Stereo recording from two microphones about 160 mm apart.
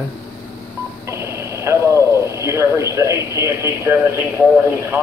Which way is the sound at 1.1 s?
15° right (ahead or behind).